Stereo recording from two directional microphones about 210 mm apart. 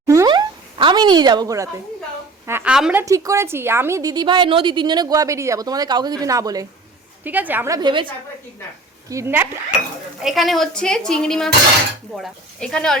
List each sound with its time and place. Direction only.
0.1 s a sound: 15° right (ahead or behind)
2.5 s a woman's voice: 5° right (ahead or behind)
9.0 s a woman's voice: 15° right (ahead or behind); by 13.0 s 5° left (ahead or behind)